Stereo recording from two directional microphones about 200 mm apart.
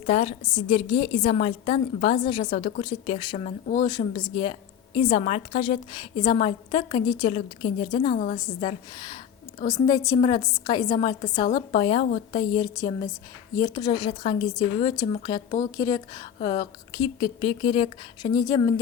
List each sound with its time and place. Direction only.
0.0 s a woman's voice: 35° left (ahead or behind)
8.1 s a woman's voice: 40° left (ahead or behind)
8.4 s a woman's voice: 20° left (ahead or behind)